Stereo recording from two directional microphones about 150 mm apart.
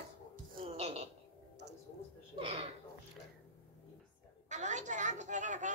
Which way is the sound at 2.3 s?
35° right (ahead or behind).